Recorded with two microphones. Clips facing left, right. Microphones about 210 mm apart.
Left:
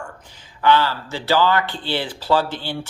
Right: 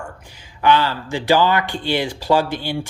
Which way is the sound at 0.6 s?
15° right (ahead or behind).